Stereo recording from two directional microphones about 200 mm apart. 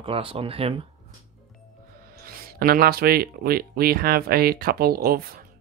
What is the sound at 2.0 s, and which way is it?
Speech, 50° right (ahead or behind).